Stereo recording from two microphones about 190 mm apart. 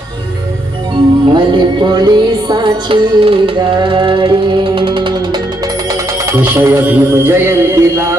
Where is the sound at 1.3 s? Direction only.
25° right (ahead or behind).